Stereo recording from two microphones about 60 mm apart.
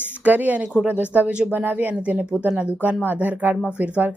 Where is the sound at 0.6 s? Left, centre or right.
Centre.